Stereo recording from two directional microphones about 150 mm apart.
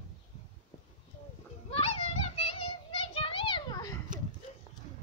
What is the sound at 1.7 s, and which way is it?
Children playing, 40° left (ahead or behind).